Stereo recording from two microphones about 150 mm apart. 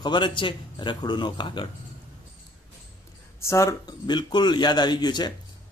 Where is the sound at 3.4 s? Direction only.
20° left (ahead or behind).